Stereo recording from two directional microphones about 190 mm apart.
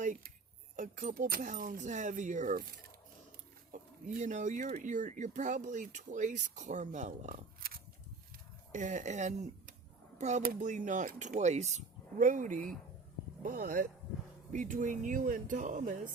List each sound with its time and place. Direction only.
0.0 s a sound: 45° right (ahead or behind)
0.8 s speech: 45° right (ahead or behind)
3.7 s speech: 40° right (ahead or behind)